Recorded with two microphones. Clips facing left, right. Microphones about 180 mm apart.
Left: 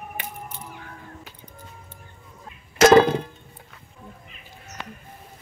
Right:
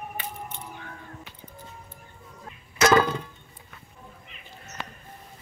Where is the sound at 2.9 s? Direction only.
30° left (ahead or behind).